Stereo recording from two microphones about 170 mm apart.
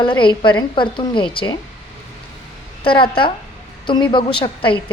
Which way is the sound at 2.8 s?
30° left (ahead or behind).